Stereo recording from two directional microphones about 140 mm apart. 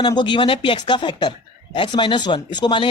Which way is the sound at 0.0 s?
30° left (ahead or behind).